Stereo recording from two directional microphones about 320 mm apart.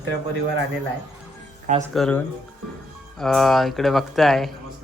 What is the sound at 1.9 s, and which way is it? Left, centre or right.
Speech, centre.